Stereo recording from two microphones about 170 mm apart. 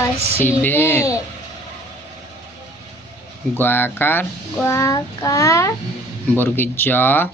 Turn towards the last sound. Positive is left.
turn(degrees=10)  # may be behind; listen again after turning